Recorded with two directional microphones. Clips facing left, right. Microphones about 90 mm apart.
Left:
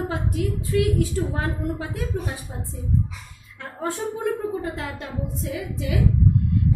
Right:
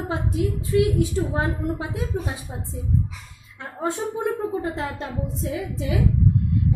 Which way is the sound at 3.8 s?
20° right (ahead or behind).